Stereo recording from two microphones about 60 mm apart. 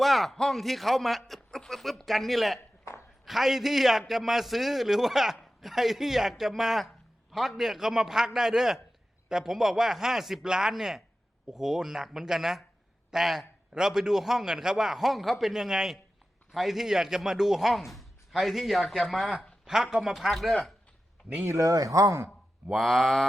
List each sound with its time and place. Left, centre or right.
0.0 s a man's voice: centre
21.5 s speech: right
22.7 s a man's voice: centre